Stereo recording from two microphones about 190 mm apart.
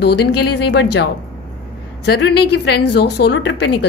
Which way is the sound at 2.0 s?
60° left (ahead or behind).